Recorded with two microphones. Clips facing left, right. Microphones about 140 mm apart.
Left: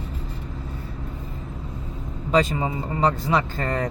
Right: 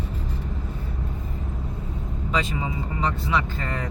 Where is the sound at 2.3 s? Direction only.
40° left (ahead or behind).